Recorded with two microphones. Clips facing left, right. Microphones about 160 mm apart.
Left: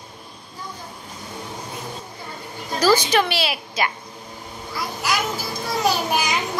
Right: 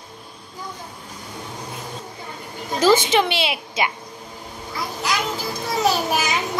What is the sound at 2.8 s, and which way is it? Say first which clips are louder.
A woman's voice: right 1 dB; 20° right (ahead or behind).